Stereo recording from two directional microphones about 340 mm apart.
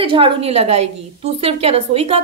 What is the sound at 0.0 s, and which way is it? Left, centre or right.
A woman's voice, centre.